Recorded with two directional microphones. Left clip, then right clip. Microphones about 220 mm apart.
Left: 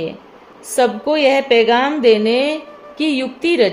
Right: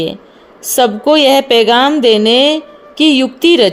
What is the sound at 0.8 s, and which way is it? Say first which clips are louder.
A woman's voice: right 5 dB; 35° right (ahead or behind).